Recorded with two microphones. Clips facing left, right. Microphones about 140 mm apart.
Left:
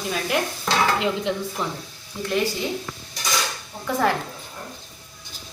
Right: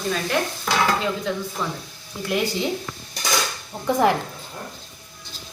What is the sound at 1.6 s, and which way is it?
Speech, 15° left (ahead or behind).